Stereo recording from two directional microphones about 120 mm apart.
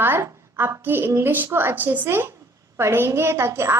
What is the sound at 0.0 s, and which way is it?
A woman's voice, 20° right (ahead or behind).